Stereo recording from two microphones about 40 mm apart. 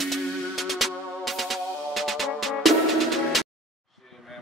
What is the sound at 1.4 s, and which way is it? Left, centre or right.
Music, centre.